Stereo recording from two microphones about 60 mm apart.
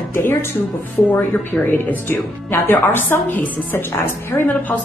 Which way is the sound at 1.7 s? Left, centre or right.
Left.